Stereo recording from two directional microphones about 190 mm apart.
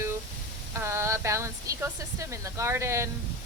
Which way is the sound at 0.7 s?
15° right (ahead or behind).